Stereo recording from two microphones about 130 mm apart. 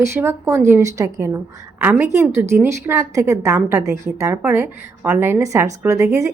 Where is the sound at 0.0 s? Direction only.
20° right (ahead or behind).